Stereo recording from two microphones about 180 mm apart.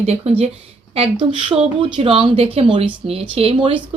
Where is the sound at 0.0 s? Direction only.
35° right (ahead or behind).